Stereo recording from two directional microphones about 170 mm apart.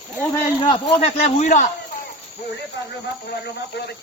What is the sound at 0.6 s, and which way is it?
Speech, 35° left (ahead or behind).